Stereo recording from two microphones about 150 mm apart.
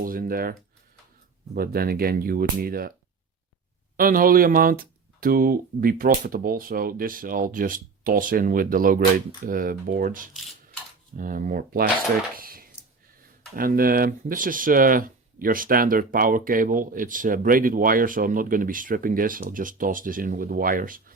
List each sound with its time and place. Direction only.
0.0 s speech: 75° right (ahead or behind)
1.5 s speech: 85° right
3.9 s speech: 70° right (ahead or behind)
12.4 s a sound: 75° right (ahead or behind)
13.6 s speech: 75° right (ahead or behind)